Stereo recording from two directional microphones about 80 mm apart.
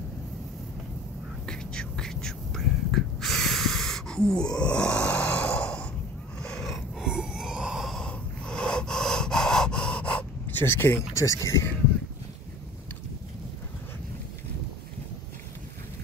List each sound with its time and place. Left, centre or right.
1.4 s whispering: centre
6.4 s a sound: centre
7.0 s a sound: centre
7.9 s breathing: centre
10.5 s speech: left
11.1 s speech: left